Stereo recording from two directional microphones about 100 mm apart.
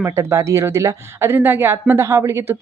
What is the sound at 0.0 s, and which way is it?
Speech, 25° right (ahead or behind).